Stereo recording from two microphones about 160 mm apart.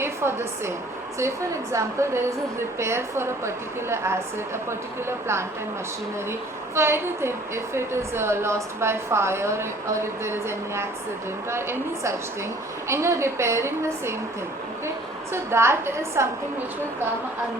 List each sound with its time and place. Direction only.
0.0 s a woman's voice: 15° right (ahead or behind)
1.7 s a woman's voice: 15° right (ahead or behind)
6.7 s a woman's voice: 15° right (ahead or behind)
11.5 s a woman's voice: 15° right (ahead or behind)
15.3 s a woman's voice: 15° right (ahead or behind)